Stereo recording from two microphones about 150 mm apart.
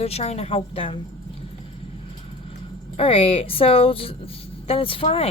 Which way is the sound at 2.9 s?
40° left (ahead or behind).